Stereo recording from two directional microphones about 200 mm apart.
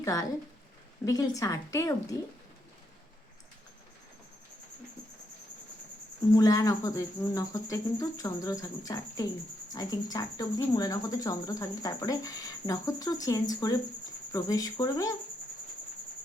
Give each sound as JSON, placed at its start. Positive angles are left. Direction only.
{"t": 0.0, "sound": "a woman's voice", "side_deg": 15}
{"t": 6.3, "sound": "speech", "side_deg": 15}